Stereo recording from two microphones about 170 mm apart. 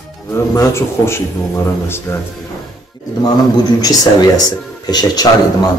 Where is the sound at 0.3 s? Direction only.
15° left (ahead or behind).